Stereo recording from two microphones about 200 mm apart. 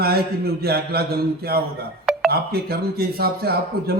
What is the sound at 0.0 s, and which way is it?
Speech, 50° right (ahead or behind).